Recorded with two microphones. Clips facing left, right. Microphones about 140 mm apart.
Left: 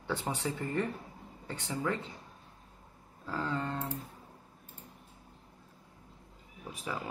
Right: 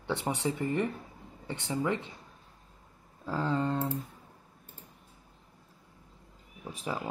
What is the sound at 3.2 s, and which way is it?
Speech, 25° right (ahead or behind).